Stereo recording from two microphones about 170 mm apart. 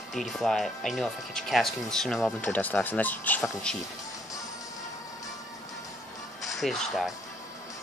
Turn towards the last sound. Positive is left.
turn(degrees=0)  # may be behind; listen again after turning